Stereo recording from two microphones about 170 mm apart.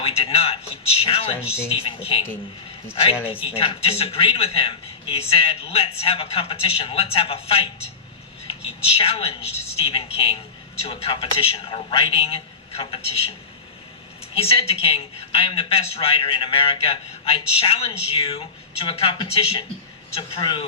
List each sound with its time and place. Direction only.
0.0 s a sound: 35° left (ahead or behind)
1.0 s a man's voice: 35° left (ahead or behind)
14.3 s a man's voice: 35° left (ahead or behind)